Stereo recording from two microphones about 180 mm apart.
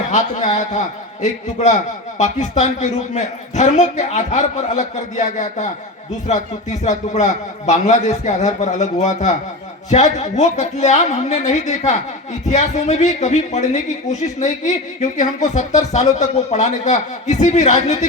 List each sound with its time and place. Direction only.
0.1 s a man's voice: 45° left (ahead or behind)